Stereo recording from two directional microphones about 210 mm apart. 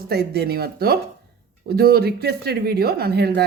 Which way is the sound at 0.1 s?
50° right (ahead or behind).